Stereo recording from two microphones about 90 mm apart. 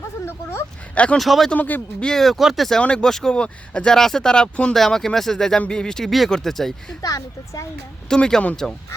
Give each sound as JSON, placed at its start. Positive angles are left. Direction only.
{"t": 0.9, "sound": "speech", "side_deg": 15}
{"t": 1.2, "sound": "speech", "side_deg": 0}
{"t": 1.5, "sound": "speech", "side_deg": 20}
{"t": 2.0, "sound": "speech", "side_deg": 5}
{"t": 7.0, "sound": "speech", "side_deg": 40}
{"t": 8.1, "sound": "speech", "side_deg": 10}